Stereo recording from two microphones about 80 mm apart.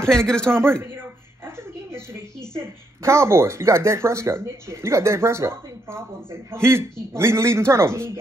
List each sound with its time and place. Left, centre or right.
0.0 s a man's voice: centre
0.5 s a sound: right
2.5 s speech: right